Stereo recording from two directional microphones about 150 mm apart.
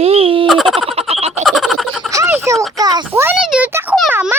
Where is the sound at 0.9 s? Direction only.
40° right (ahead or behind).